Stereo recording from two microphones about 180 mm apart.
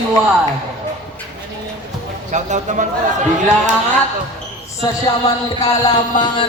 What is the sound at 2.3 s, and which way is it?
Speech, 40° right (ahead or behind).